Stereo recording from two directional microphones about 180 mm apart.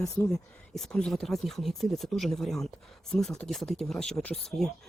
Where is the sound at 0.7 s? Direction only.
5° left (ahead or behind).